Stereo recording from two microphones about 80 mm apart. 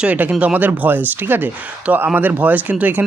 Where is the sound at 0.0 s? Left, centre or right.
Centre.